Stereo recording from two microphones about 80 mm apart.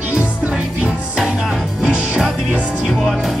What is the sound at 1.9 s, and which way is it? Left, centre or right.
Music, centre.